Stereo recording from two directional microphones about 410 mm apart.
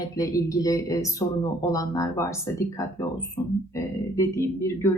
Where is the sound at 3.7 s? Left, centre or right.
Centre.